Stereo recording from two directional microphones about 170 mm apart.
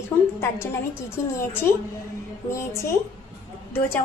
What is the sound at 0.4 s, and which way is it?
A woman's voice, 15° left (ahead or behind).